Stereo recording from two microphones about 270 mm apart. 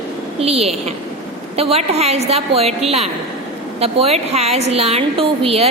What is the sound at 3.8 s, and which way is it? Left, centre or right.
A woman's voice, right.